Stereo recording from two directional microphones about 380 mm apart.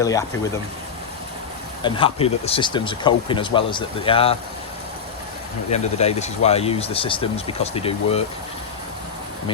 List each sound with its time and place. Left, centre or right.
0.0 s speech: centre
1.8 s speech: centre
5.7 s speech: centre